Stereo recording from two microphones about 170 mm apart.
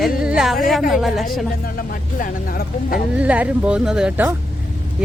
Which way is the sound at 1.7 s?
55° left (ahead or behind).